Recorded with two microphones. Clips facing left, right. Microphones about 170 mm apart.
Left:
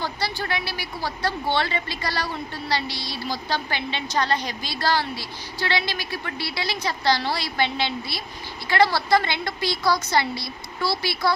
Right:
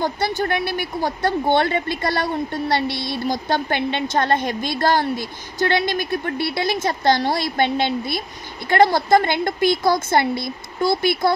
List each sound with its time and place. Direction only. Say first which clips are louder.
0.0 s a woman's voice: right 7 dB; 50° right (ahead or behind)